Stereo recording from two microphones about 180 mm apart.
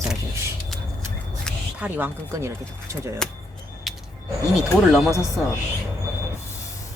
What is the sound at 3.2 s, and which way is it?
Speech, 5° left (ahead or behind).